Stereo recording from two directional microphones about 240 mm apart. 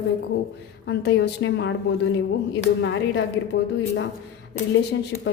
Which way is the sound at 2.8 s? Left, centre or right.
Left.